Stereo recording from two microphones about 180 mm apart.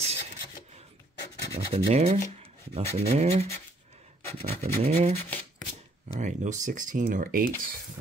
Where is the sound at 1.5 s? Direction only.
35° right (ahead or behind).